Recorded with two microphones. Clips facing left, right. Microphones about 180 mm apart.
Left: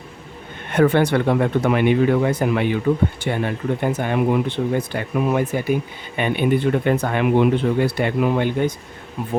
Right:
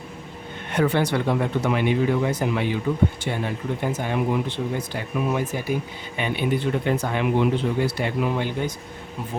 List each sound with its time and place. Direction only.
0.7 s speech: 55° left (ahead or behind)